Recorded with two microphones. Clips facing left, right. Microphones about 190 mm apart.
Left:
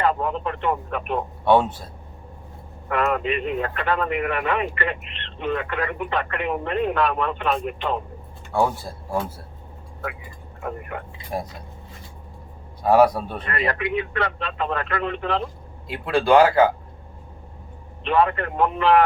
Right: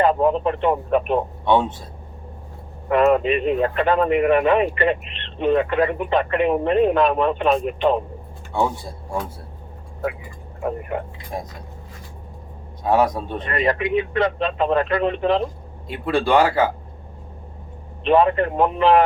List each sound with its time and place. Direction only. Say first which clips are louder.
0.0 s speech: right 6 dB; 20° right (ahead or behind)
2.9 s speech: right 6 dB; 20° right (ahead or behind)
10.6 s speech: right 6 dB; 25° right (ahead or behind)
12.9 s a man's voice: left 2 dB; 10° left (ahead or behind)
13.4 s speech: right 5 dB; 20° right (ahead or behind)
15.9 s speech: left 1 dB; centre (ahead or behind)
18.0 s speech: right 4 dB; 20° right (ahead or behind)